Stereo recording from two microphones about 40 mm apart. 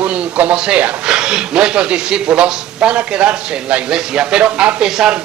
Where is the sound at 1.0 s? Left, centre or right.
Right.